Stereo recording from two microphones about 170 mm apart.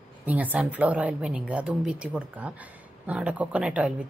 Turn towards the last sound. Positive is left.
turn(degrees=-5)  # may be behind; listen again after turning